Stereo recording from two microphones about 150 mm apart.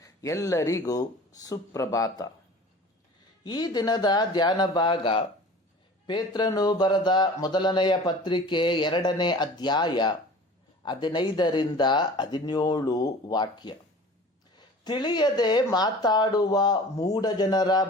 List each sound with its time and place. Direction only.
0.0 s speech: 20° left (ahead or behind)
3.4 s speech: 25° left (ahead or behind)